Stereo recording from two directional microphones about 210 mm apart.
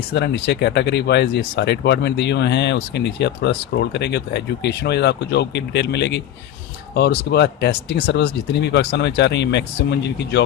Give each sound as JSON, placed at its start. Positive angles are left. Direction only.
{"t": 0.1, "sound": "speech", "side_deg": 55}